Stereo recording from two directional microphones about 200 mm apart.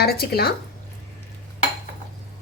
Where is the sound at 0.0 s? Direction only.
50° left (ahead or behind).